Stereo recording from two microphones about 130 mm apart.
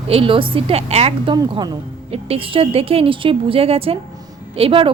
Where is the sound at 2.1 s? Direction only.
45° right (ahead or behind).